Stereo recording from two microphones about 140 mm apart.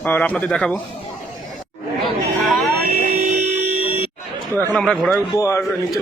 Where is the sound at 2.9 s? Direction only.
75° right (ahead or behind).